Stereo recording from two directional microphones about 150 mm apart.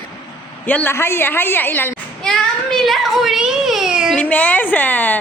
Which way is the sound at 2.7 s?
Centre (ahead or behind).